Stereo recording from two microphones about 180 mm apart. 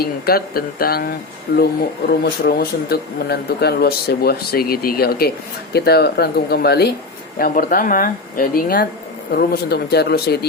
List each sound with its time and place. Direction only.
0.0 s speech: 55° left (ahead or behind)